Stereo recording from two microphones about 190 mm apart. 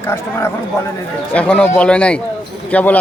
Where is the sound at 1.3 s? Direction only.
5° left (ahead or behind).